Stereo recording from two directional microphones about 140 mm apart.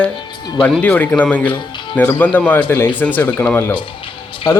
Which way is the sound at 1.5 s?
35° left (ahead or behind).